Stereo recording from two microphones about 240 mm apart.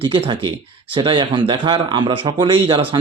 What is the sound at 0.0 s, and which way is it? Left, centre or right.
Speech, right.